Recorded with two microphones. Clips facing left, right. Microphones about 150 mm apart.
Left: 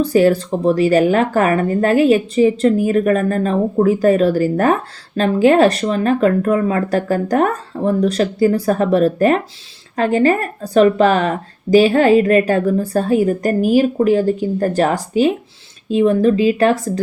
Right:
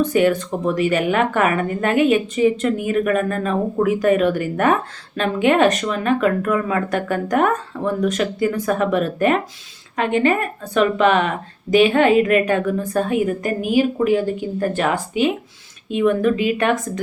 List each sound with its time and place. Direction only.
0.0 s a woman's voice: 35° left (ahead or behind)